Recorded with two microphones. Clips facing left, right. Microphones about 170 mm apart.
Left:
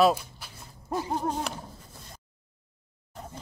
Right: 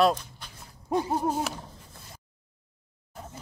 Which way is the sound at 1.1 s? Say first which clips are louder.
Right 2 dB; 10° right (ahead or behind).